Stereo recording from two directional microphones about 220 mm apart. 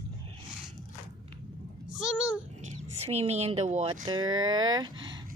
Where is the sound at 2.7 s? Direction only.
30° right (ahead or behind).